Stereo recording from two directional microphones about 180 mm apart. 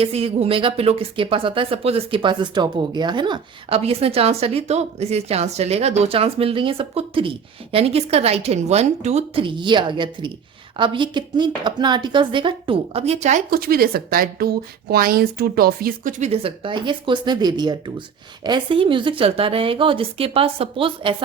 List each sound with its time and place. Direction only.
0.0 s a woman's voice: 30° right (ahead or behind)
13.5 s a woman's voice: 55° right (ahead or behind); by 21.2 s 30° right (ahead or behind)